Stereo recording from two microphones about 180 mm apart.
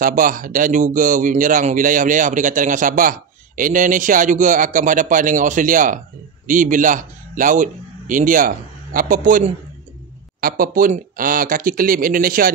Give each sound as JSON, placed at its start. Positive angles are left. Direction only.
{"t": 0.0, "sound": "a man's voice", "side_deg": -50}